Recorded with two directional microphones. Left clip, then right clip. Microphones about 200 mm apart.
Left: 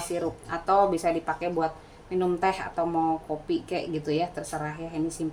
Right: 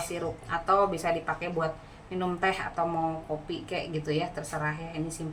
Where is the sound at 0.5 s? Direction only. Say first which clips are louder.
Left 2 dB; 25° left (ahead or behind).